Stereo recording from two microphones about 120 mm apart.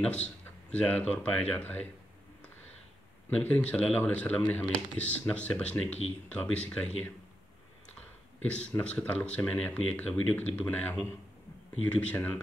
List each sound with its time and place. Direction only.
0.0 s speech: 10° left (ahead or behind)
3.3 s speech: 10° left (ahead or behind)
5.9 s speech: 60° left (ahead or behind)
6.2 s speech: 10° left (ahead or behind)
8.5 s speech: 10° left (ahead or behind)